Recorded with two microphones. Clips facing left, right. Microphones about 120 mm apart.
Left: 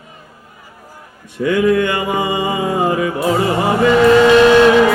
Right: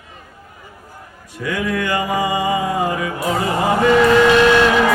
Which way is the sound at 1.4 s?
25° left (ahead or behind).